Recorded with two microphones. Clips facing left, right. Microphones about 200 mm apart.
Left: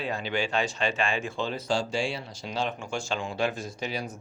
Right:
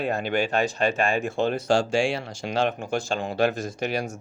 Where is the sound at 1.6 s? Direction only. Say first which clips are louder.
Right 5 dB; 75° right (ahead or behind).